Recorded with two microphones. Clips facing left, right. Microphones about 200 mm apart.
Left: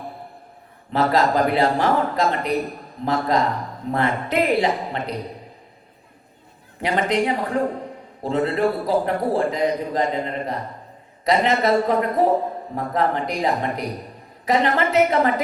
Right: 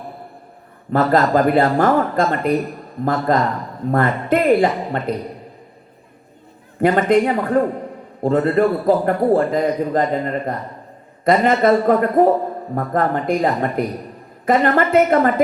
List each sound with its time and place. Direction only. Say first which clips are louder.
0.9 s a man's voice: right 4 dB; 50° right (ahead or behind)
6.8 s a man's voice: right 6 dB; 50° right (ahead or behind)